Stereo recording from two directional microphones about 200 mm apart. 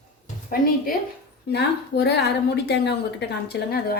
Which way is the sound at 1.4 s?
55° left (ahead or behind).